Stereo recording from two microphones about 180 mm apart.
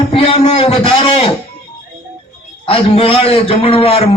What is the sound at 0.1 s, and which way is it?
A man's voice, 30° left (ahead or behind).